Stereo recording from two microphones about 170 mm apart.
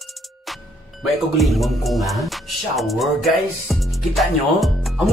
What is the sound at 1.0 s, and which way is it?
Speech, centre (ahead or behind).